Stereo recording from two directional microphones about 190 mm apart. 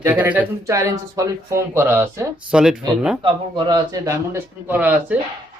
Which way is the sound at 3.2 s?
25° right (ahead or behind).